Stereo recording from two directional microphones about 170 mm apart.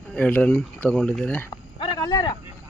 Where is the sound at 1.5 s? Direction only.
25° left (ahead or behind).